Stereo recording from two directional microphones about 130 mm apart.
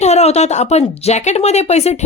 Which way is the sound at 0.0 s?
55° left (ahead or behind).